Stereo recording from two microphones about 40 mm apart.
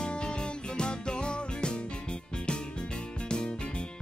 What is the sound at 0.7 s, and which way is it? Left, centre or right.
Music, left.